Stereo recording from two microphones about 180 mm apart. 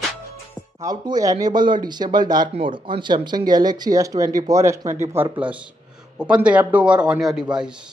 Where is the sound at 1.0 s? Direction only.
20° right (ahead or behind).